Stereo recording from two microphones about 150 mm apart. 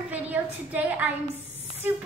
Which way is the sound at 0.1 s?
10° right (ahead or behind).